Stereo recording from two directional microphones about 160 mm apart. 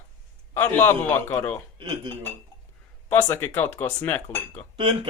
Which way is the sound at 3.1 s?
15° left (ahead or behind).